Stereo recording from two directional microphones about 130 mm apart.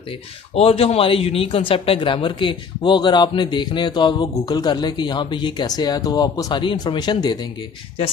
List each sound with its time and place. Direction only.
0.6 s speech: 50° left (ahead or behind); by 7.3 s 35° left (ahead or behind)